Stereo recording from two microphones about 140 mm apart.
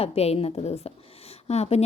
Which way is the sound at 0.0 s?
45° left (ahead or behind).